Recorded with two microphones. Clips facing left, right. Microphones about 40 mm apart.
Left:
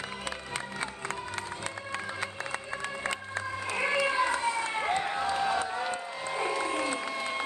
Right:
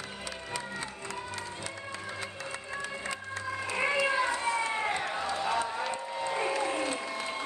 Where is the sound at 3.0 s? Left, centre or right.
Left.